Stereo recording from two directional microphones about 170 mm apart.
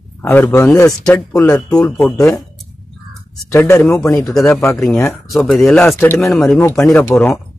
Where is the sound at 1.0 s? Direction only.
5° left (ahead or behind).